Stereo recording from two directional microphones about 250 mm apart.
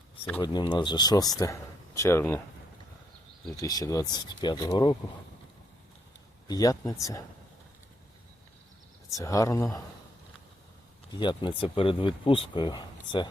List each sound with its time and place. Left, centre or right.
0.3 s speech: centre
3.6 s speech: centre
6.5 s speech: centre
9.1 s speech: centre
11.1 s speech: centre